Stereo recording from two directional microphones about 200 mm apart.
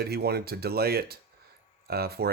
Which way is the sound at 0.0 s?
50° right (ahead or behind).